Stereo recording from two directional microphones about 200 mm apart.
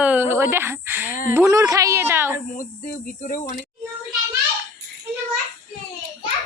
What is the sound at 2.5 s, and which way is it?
Cricket, 40° left (ahead or behind).